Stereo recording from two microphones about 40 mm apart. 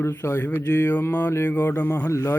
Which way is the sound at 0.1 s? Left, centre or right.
Left.